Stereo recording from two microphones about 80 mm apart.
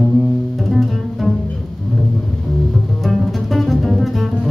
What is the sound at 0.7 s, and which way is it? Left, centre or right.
Music, centre.